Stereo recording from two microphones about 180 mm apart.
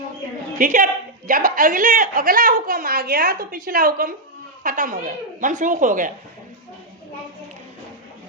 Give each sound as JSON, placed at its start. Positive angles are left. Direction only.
{"t": 0.6, "sound": "a woman's voice", "side_deg": -50}